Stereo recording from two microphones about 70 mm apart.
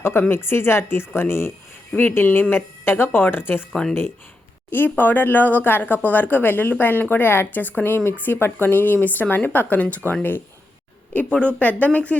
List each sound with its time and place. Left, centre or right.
0.0 s speech: left
3.7 s speech: centre
4.7 s speech: left